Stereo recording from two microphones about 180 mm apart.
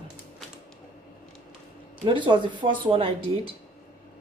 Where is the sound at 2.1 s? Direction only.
25° right (ahead or behind).